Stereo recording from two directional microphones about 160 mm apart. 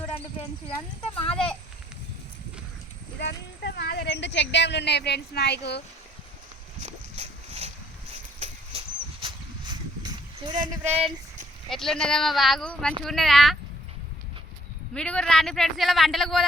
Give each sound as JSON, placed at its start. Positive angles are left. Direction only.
{"t": 1.3, "sound": "a man's voice", "side_deg": 5}
{"t": 3.2, "sound": "a woman's voice", "side_deg": 90}
{"t": 6.8, "sound": "boat", "side_deg": -40}
{"t": 8.1, "sound": "a sound", "side_deg": -40}
{"t": 9.2, "sound": "a sound", "side_deg": -25}
{"t": 10.8, "sound": "speech", "side_deg": -10}
{"t": 11.7, "sound": "a man's voice", "side_deg": 0}
{"t": 14.9, "sound": "a man's voice", "side_deg": 5}